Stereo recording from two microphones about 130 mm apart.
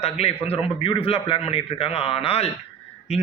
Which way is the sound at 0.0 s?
50° left (ahead or behind).